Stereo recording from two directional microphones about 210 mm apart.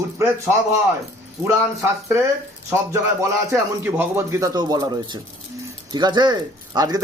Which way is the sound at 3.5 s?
10° right (ahead or behind).